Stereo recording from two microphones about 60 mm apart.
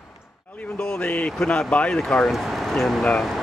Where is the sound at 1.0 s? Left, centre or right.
Left.